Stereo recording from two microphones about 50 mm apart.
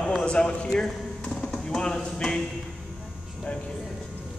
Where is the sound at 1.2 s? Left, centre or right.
Left.